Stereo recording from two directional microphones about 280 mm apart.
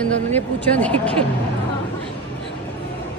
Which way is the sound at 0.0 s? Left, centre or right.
Centre.